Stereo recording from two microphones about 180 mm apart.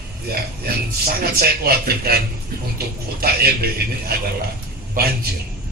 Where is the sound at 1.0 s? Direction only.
60° right (ahead or behind).